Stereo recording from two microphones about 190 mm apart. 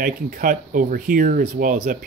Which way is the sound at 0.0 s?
50° right (ahead or behind).